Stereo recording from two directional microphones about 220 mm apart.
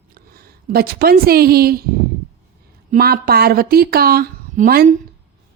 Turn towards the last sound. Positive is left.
turn(degrees=-45)  # may be behind; listen again after turning